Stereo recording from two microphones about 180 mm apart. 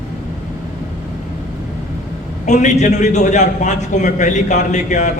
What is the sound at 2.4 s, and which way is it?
A man's voice, 40° left (ahead or behind).